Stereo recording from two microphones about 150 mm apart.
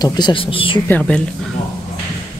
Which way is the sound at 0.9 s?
10° left (ahead or behind).